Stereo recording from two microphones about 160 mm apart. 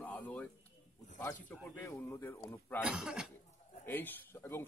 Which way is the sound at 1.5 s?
15° left (ahead or behind).